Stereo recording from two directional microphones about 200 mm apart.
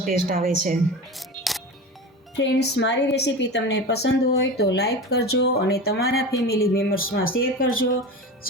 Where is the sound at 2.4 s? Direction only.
60° left (ahead or behind).